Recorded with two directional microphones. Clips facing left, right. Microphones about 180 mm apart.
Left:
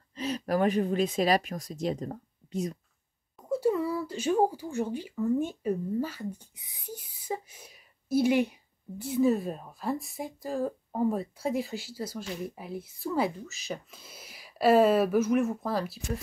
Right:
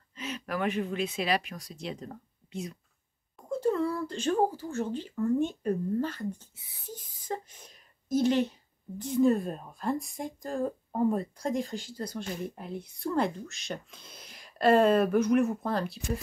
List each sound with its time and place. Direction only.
0.1 s speech: 35° left (ahead or behind)
3.3 s speech: 5° left (ahead or behind)